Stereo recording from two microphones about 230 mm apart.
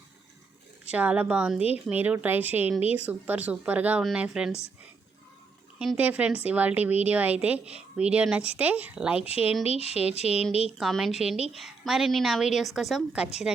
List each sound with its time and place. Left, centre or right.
0.9 s a woman's voice: centre
5.8 s a woman's voice: centre
9.2 s speech: left
10.8 s a woman's voice: centre